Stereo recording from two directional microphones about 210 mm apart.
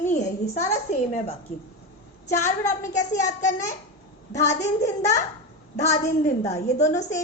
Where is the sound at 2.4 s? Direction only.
15° left (ahead or behind).